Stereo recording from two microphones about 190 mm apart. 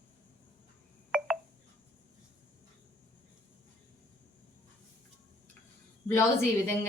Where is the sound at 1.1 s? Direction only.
5° right (ahead or behind).